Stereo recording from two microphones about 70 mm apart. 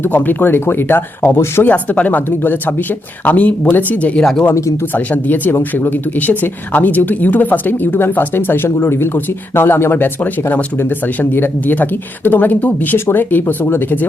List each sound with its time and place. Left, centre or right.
0.0 s speech: left
4.2 s speech: centre
4.9 s speech: left